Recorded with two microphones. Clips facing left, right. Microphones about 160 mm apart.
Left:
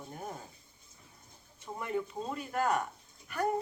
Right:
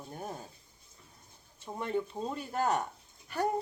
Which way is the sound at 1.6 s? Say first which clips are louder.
Right 2 dB; 30° right (ahead or behind).